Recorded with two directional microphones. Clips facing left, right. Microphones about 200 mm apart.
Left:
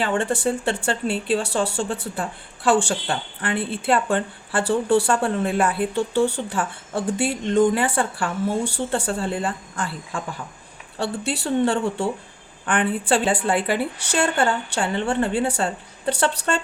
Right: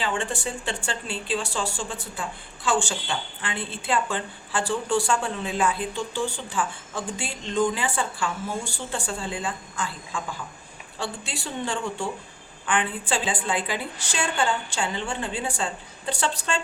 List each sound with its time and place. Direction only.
0.0 s speech: 55° left (ahead or behind)